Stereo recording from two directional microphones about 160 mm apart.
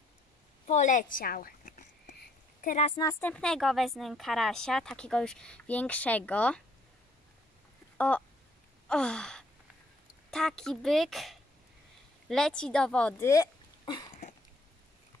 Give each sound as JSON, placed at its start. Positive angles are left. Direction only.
{"t": 0.7, "sound": "a sound", "side_deg": 50}
{"t": 3.0, "sound": "a woman's voice", "side_deg": 20}
{"t": 3.3, "sound": "speech", "side_deg": 5}
{"t": 8.8, "sound": "sigh", "side_deg": 5}
{"t": 10.3, "sound": "speech", "side_deg": 5}
{"t": 13.3, "sound": "a sound", "side_deg": 25}